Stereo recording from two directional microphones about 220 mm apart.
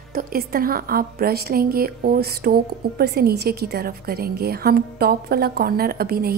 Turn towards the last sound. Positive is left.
turn(degrees=-45)  # may be behind; listen again after turning